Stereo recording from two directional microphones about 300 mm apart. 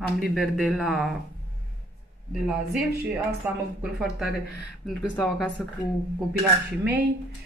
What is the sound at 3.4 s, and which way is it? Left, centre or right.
Speech, centre.